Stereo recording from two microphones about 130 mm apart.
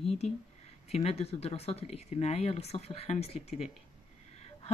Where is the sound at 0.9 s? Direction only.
55° left (ahead or behind).